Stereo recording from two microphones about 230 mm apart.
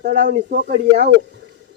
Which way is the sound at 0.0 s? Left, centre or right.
Right.